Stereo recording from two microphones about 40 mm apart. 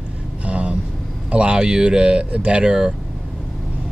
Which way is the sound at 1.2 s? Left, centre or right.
Right.